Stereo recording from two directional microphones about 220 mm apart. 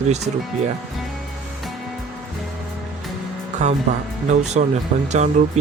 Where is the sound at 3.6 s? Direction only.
30° right (ahead or behind).